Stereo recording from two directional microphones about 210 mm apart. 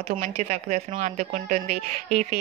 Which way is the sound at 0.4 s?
35° right (ahead or behind).